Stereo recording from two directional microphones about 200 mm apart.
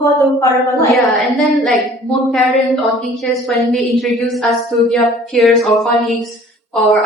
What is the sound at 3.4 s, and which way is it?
A woman's voice, centre (ahead or behind).